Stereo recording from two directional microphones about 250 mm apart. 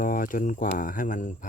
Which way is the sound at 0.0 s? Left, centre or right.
Left.